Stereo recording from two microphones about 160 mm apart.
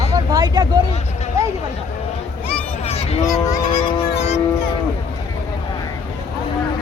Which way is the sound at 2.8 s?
40° left (ahead or behind).